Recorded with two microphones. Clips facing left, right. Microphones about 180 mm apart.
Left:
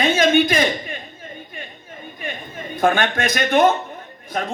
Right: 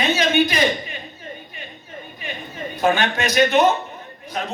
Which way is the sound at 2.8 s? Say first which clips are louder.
Left 1 dB; 50° left (ahead or behind).